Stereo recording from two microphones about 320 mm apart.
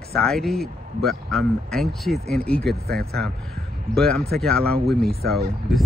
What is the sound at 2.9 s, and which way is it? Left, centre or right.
Speech, right.